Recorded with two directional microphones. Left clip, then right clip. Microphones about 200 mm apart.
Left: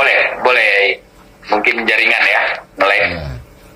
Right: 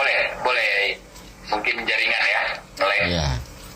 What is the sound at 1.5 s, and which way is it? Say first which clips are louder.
Speech: left 9 dB; 55° left (ahead or behind).